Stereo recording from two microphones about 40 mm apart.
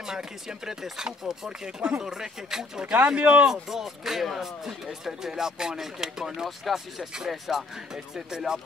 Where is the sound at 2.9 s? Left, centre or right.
Right.